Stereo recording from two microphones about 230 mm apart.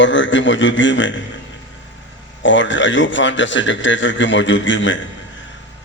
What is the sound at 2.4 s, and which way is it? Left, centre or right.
A man's voice, left.